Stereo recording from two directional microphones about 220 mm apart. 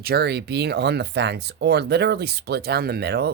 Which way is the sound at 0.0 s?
45° right (ahead or behind).